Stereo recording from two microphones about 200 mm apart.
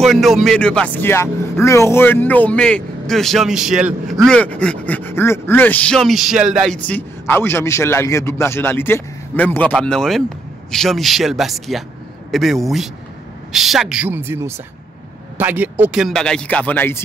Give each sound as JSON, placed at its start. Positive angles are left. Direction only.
{"t": 0.0, "sound": "speech", "side_deg": 0}
{"t": 6.8, "sound": "a man's voice", "side_deg": 10}